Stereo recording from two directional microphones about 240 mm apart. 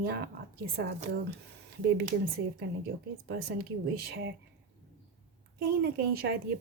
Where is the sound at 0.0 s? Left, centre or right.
Right.